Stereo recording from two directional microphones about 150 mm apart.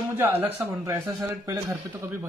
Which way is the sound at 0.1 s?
15° right (ahead or behind).